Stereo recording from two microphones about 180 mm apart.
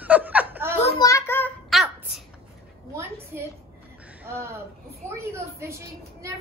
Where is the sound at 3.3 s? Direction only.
10° right (ahead or behind).